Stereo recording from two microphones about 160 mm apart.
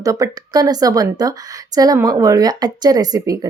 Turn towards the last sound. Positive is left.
turn(degrees=-25)  # may be behind; listen again after turning